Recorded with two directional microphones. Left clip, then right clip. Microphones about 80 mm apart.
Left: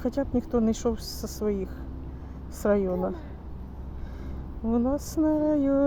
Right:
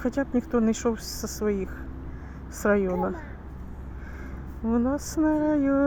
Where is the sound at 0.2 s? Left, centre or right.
Right.